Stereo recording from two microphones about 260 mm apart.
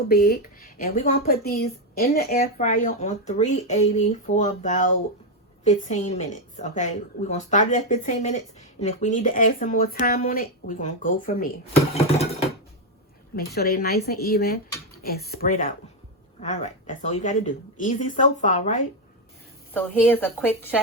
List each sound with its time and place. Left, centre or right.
0.1 s speech: left
13.3 s speech: left
19.7 s a woman's voice: centre